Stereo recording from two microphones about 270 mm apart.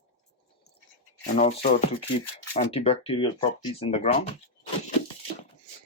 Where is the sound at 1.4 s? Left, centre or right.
Left.